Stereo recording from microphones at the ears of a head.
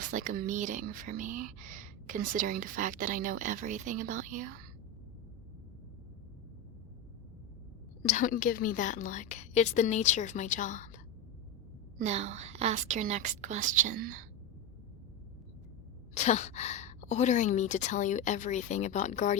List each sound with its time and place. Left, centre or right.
0.0 s speech: right
8.0 s a woman's voice: left
11.9 s speech: right
16.1 s a woman's voice: left